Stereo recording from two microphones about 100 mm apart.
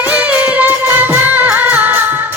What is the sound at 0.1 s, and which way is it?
Music, 15° right (ahead or behind).